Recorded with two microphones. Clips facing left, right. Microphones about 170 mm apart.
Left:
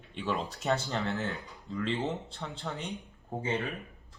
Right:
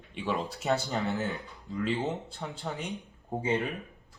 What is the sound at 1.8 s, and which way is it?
Speech, centre (ahead or behind).